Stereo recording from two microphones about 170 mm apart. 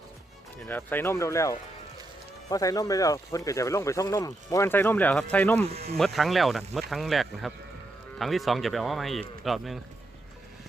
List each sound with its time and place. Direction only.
0.6 s speech: 10° left (ahead or behind)